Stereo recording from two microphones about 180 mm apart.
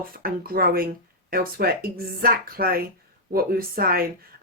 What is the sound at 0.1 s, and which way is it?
Speech, 55° right (ahead or behind).